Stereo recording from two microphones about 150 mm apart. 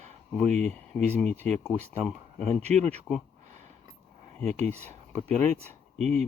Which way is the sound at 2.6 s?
45° right (ahead or behind).